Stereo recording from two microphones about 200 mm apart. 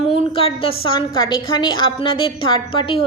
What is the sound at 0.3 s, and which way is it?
A woman's voice, 30° left (ahead or behind).